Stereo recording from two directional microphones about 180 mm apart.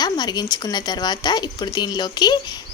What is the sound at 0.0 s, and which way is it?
Speech, 25° left (ahead or behind).